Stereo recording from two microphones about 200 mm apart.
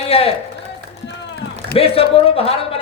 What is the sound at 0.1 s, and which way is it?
Speech, 30° left (ahead or behind).